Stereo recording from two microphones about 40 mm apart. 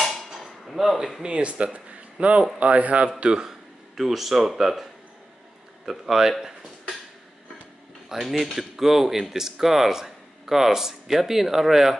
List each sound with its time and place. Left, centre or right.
0.0 s a sound: centre
1.2 s speech: right
3.2 s a man's voice: right
3.4 s speech: centre
5.9 s speech: centre
8.1 s speech: centre